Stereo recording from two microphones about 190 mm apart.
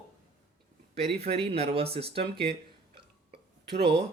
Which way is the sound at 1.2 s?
30° right (ahead or behind).